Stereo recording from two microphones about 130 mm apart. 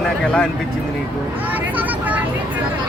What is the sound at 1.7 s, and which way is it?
Vehicle, 10° right (ahead or behind).